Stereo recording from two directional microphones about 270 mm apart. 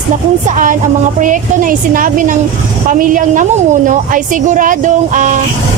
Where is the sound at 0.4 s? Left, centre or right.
Right.